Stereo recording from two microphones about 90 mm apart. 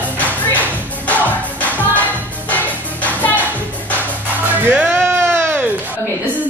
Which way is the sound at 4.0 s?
20° right (ahead or behind).